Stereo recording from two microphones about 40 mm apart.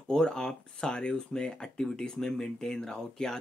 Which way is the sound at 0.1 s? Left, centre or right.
Centre.